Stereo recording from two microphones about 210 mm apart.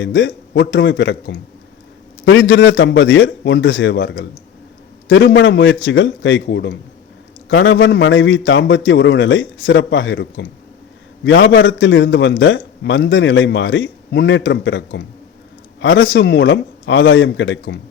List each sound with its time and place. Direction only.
0.0 s a man's voice: 60° left (ahead or behind)